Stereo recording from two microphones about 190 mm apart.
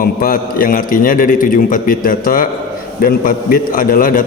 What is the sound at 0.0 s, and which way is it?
A man's voice, 50° left (ahead or behind).